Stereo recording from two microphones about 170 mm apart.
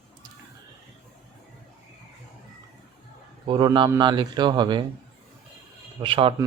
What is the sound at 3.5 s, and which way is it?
Speech, 25° right (ahead or behind).